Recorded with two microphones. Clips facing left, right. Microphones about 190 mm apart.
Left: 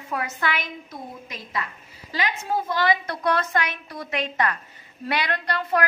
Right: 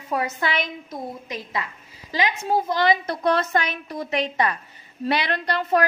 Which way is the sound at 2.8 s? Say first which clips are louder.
Right 3 dB; 20° right (ahead or behind).